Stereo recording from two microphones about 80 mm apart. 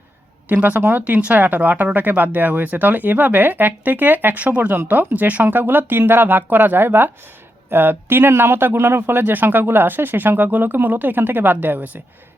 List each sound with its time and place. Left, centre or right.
0.4 s a man's voice: right